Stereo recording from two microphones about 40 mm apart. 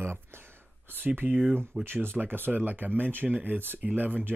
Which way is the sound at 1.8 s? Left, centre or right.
Right.